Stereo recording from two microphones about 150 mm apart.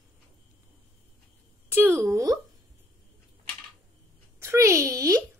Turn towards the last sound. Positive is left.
turn(degrees=-20)  # may be behind; listen again after turning